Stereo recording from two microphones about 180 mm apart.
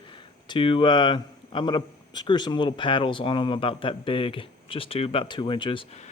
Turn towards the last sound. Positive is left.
turn(degrees=30)  # may be behind; listen again after turning